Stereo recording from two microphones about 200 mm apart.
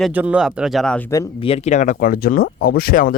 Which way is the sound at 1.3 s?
30° left (ahead or behind).